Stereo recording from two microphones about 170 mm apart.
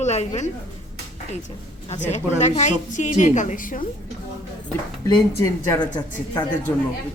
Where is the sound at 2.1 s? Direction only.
40° left (ahead or behind).